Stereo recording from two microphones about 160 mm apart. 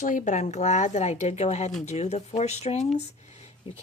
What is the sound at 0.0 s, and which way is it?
Speech, 55° left (ahead or behind).